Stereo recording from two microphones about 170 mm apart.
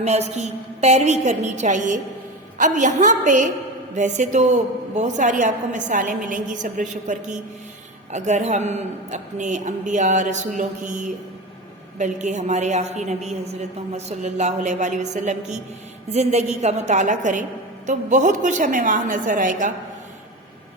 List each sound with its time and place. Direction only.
0.0 s a woman's voice: 40° right (ahead or behind)